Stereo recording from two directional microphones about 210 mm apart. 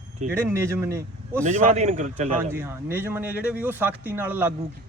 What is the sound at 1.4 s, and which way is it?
Speech, 35° right (ahead or behind).